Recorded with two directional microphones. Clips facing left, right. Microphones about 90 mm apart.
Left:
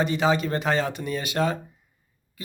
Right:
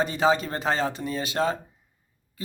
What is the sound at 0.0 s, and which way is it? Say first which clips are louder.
A man's voice: even; 35° right (ahead or behind).